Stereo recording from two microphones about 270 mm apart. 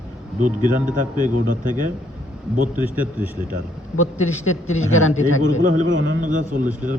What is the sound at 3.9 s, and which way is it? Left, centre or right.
Speech, left.